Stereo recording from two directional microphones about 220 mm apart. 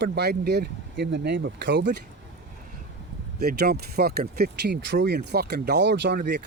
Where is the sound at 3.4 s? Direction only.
45° right (ahead or behind).